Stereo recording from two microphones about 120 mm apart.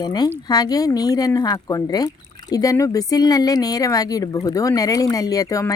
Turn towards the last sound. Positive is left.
turn(degrees=30)  # may be behind; listen again after turning